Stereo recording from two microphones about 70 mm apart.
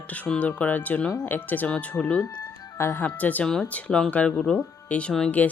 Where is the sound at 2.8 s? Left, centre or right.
Left.